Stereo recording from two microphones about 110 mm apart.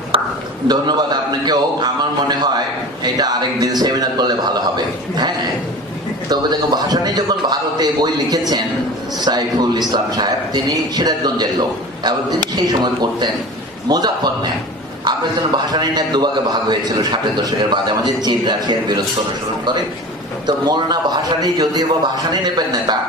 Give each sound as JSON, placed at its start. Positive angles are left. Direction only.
{"t": 0.1, "sound": "a sound", "side_deg": -55}
{"t": 0.7, "sound": "a man's voice", "side_deg": -40}
{"t": 20.4, "sound": "a man's voice", "side_deg": -40}